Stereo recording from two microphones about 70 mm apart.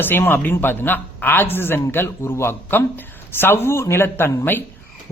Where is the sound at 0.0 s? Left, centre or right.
Left.